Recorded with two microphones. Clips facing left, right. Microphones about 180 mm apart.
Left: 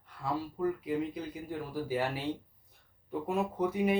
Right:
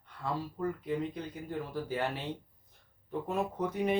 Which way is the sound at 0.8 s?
5° left (ahead or behind).